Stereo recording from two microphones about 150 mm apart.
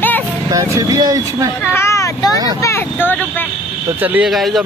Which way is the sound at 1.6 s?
15° left (ahead or behind).